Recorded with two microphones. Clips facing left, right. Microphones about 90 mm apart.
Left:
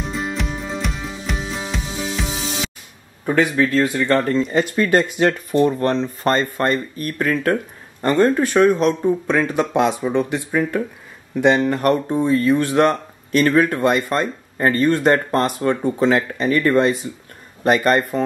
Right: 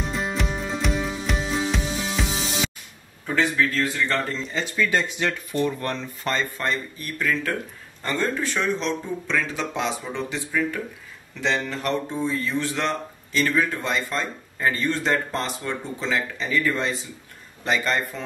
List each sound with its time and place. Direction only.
0.1 s music: centre (ahead or behind)
3.3 s speech: 50° left (ahead or behind)
5.5 s speech: 35° left (ahead or behind)
6.3 s speech: 50° left (ahead or behind)